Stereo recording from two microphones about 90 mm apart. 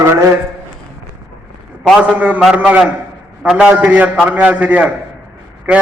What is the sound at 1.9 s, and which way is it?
A man's voice, 15° right (ahead or behind).